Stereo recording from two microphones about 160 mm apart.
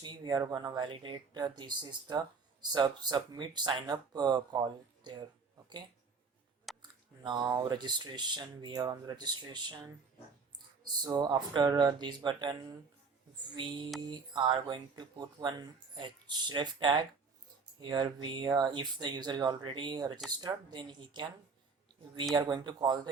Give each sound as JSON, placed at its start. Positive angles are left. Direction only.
{"t": 0.0, "sound": "speech", "side_deg": -25}
{"t": 6.7, "sound": "a sound", "side_deg": 0}
{"t": 7.3, "sound": "speech", "side_deg": -25}
{"t": 11.0, "sound": "speech", "side_deg": -25}
{"t": 14.1, "sound": "speech", "side_deg": -30}
{"t": 22.4, "sound": "speech", "side_deg": -25}